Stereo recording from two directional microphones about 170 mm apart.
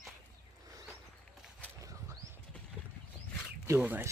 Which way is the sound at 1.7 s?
20° right (ahead or behind).